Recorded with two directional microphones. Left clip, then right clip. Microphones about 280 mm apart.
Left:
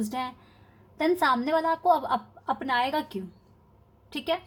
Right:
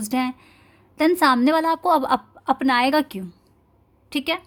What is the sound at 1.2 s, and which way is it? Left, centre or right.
Speech, right.